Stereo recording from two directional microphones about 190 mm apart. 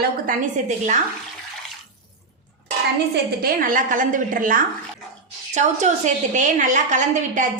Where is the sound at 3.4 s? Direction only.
45° right (ahead or behind).